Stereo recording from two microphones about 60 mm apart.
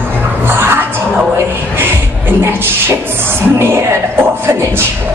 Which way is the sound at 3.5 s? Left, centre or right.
Right.